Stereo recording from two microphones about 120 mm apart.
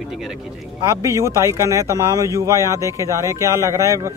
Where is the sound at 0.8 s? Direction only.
25° right (ahead or behind).